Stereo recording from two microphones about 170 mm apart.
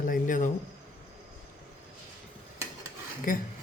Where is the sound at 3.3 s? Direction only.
55° left (ahead or behind).